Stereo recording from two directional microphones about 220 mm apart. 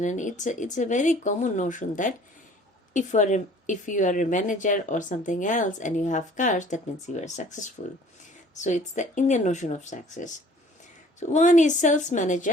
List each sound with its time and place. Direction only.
0.0 s speech: 35° left (ahead or behind)